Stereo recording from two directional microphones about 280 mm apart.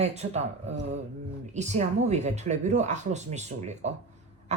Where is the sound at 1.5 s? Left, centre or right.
Right.